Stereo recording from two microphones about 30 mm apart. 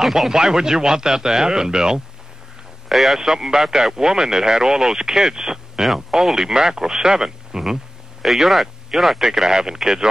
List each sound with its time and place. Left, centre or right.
0.0 s speech: centre
0.3 s speech: centre
2.9 s speech: centre
3.2 s speech: centre